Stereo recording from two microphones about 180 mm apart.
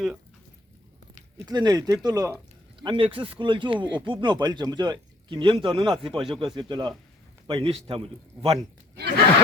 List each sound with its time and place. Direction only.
1.5 s speech: 20° right (ahead or behind)
2.8 s a man's voice: 30° right (ahead or behind)